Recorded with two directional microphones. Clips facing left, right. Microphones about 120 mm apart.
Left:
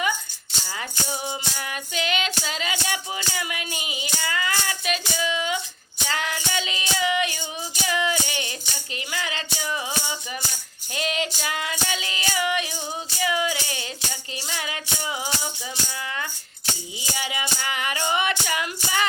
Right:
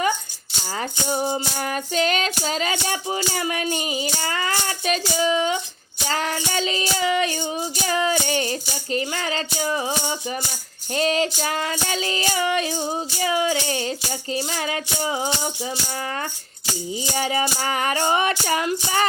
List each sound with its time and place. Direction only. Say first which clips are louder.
0.6 s music: right 5 dB; 40° right (ahead or behind)
2.4 s child singing: right 5 dB; 40° right (ahead or behind)
6.1 s music: right 4 dB; 35° right (ahead or behind)
8.9 s child singing: right 7 dB; 40° right (ahead or behind)
17.0 s child singing: right 8 dB; 40° right (ahead or behind)